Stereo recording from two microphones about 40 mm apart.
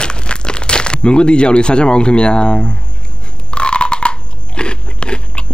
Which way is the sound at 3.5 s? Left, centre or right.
Left.